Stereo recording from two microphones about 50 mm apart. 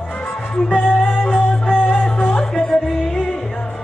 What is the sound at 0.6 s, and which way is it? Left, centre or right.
Music, centre.